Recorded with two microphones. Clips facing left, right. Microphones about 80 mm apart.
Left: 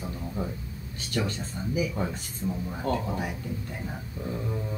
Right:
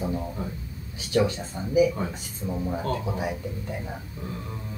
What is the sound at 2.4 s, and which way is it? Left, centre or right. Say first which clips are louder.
Speech: even; centre.